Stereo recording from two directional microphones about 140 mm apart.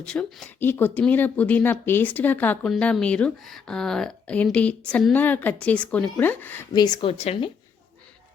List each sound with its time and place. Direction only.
0.0 s speech: 5° left (ahead or behind)
6.7 s speech: 30° left (ahead or behind)
7.1 s a woman's voice: 45° left (ahead or behind)